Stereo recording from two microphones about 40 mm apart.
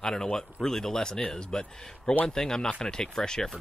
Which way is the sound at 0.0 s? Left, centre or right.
Centre.